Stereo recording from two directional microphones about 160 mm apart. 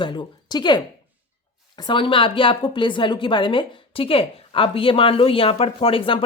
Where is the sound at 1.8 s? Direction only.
30° left (ahead or behind).